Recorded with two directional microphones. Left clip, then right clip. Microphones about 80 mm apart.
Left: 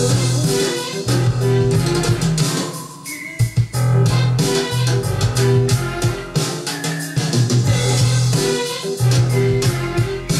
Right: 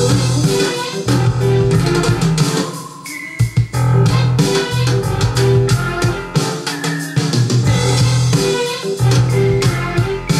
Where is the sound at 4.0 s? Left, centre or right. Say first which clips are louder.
Right 3 dB; right.